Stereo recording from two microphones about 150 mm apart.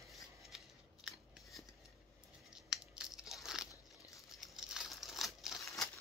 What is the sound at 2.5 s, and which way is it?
Crunch, 5° right (ahead or behind).